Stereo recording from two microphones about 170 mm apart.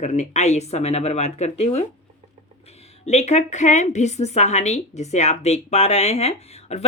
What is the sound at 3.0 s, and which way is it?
Speech, 40° left (ahead or behind).